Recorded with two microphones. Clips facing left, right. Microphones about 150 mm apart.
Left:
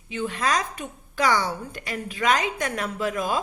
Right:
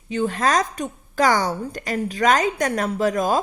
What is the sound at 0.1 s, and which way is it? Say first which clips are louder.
A woman's voice: right 5 dB; 45° right (ahead or behind).